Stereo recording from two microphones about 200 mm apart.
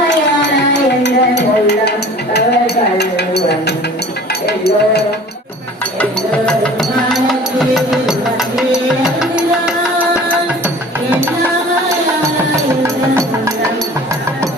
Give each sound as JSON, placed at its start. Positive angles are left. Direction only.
{"t": 0.1, "sound": "music", "side_deg": 60}
{"t": 2.3, "sound": "a sound", "side_deg": 55}
{"t": 6.0, "sound": "music", "side_deg": 5}
{"t": 12.8, "sound": "music", "side_deg": -15}